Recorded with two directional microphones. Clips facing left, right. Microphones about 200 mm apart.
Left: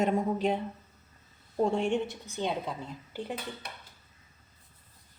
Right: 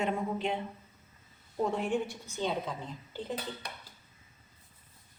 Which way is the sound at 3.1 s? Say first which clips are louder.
Left 1 dB; 15° left (ahead or behind).